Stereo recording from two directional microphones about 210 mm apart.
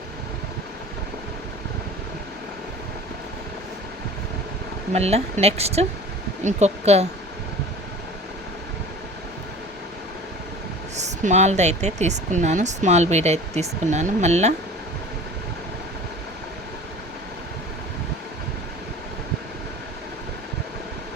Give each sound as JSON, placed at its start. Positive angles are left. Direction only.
{"t": 4.9, "sound": "speech", "side_deg": -30}
{"t": 10.9, "sound": "speech", "side_deg": -35}